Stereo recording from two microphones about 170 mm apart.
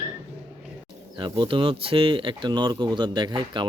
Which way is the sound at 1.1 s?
25° right (ahead or behind).